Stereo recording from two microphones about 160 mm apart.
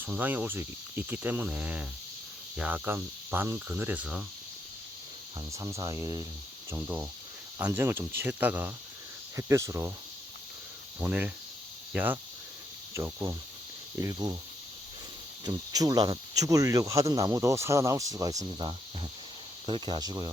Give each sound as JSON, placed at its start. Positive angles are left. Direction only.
{"t": 0.0, "sound": "speech", "side_deg": -10}
{"t": 5.5, "sound": "speech", "side_deg": -20}
{"t": 11.0, "sound": "speech", "side_deg": -10}
{"t": 15.4, "sound": "speech", "side_deg": -25}